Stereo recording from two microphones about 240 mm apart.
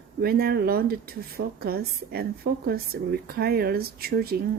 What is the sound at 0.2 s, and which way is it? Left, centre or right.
Speech, right.